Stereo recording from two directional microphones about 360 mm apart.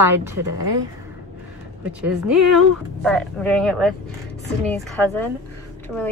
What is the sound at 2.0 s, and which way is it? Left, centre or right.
Speech, centre.